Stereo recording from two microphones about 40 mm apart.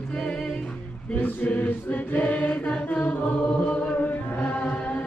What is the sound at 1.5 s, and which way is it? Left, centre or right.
Chant, left.